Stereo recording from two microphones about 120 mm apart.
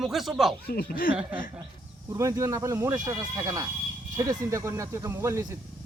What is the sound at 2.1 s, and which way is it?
Speech, 25° right (ahead or behind).